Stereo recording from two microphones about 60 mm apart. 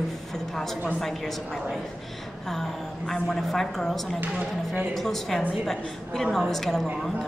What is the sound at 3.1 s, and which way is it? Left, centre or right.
Speech, centre.